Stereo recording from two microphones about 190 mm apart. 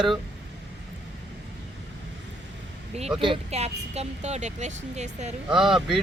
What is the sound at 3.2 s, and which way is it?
Speech, 30° right (ahead or behind).